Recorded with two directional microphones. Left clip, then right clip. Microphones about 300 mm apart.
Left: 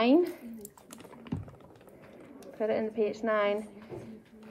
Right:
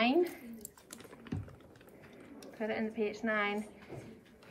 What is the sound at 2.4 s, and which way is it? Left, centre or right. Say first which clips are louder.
A woman's voice: left 7 dB; centre.